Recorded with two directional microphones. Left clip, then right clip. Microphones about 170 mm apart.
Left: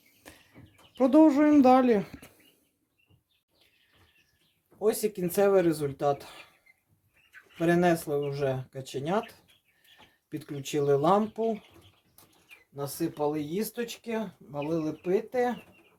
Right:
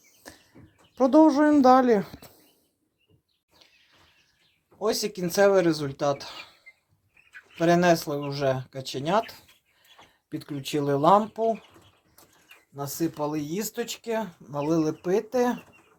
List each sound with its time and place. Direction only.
0.9 s a sound: 10° right (ahead or behind)
4.8 s speech: 20° right (ahead or behind)
7.6 s speech: 20° right (ahead or behind)
12.7 s speech: 30° right (ahead or behind)
14.5 s speech: 60° right (ahead or behind)